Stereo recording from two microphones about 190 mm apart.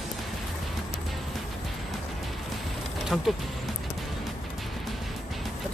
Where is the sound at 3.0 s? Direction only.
Centre (ahead or behind).